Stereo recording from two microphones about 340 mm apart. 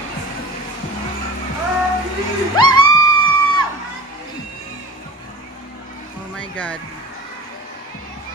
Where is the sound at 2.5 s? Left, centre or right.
Centre.